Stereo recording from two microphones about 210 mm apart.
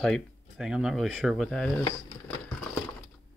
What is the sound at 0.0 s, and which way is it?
Speech, centre (ahead or behind).